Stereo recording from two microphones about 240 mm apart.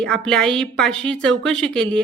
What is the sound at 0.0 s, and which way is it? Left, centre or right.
A woman's voice, centre.